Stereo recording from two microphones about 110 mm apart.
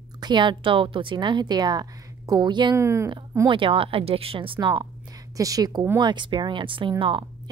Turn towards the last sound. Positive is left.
turn(degrees=-50)  # may be behind; listen again after turning